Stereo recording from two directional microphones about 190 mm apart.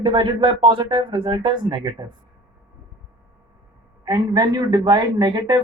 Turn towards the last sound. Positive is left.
turn(degrees=-20)  # may be behind; listen again after turning